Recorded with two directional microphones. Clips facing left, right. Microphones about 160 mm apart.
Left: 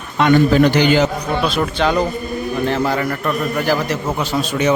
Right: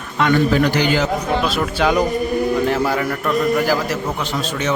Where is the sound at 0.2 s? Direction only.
25° left (ahead or behind).